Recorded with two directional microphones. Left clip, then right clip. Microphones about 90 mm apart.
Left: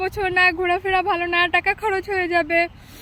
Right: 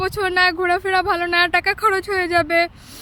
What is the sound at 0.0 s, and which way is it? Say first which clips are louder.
Speech: right 1 dB; 60° right (ahead or behind).